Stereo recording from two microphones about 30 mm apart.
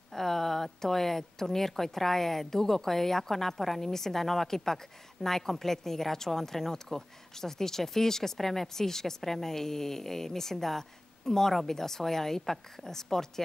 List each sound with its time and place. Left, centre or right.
0.1 s speech: centre